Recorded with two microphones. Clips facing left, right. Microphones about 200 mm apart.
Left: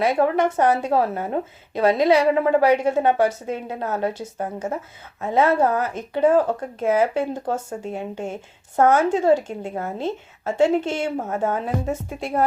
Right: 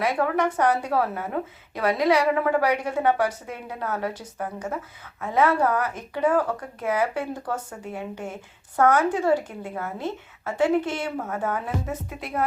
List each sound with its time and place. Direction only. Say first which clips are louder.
0.0 s speech: left 4 dB; 25° left (ahead or behind)